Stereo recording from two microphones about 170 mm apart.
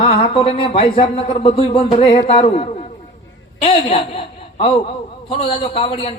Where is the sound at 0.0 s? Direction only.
35° left (ahead or behind).